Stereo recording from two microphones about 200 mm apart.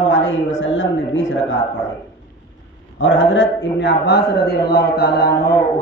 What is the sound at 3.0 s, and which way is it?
A man's voice, 70° left (ahead or behind).